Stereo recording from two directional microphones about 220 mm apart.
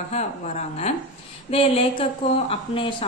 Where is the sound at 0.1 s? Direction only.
30° left (ahead or behind).